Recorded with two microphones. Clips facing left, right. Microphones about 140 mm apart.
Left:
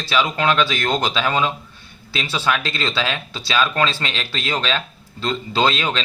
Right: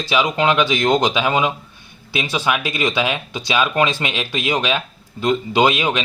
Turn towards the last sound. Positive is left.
turn(degrees=-15)  # may be behind; listen again after turning